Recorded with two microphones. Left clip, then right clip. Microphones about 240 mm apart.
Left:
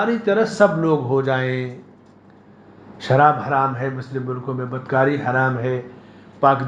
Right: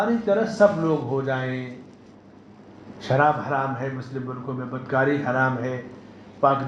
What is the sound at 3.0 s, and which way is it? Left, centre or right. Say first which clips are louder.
Speech: left 5 dB; left.